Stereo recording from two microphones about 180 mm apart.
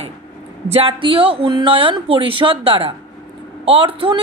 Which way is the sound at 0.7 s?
30° right (ahead or behind).